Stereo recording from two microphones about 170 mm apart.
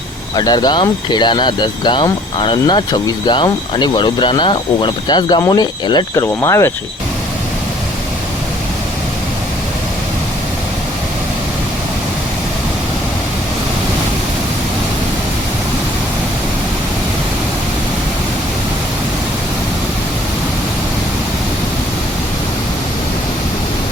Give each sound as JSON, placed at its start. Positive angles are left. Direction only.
{"t": 0.3, "sound": "speech", "side_deg": 25}